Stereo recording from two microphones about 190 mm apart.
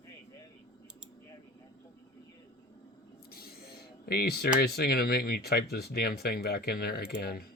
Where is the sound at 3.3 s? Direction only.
55° left (ahead or behind).